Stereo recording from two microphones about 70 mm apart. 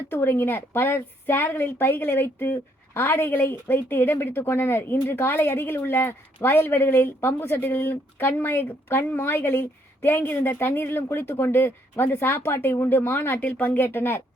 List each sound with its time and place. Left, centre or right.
0.1 s a woman's voice: left